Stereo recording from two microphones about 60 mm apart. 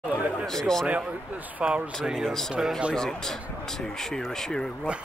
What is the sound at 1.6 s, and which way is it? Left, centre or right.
Speech, centre.